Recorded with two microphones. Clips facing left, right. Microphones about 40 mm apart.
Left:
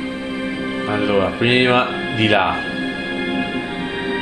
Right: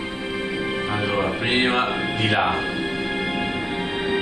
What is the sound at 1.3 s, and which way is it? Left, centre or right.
Speech, left.